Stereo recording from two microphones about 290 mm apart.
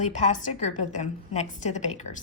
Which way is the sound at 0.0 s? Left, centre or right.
Left.